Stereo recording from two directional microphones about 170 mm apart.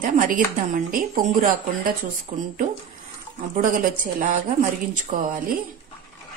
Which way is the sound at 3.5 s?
50° right (ahead or behind).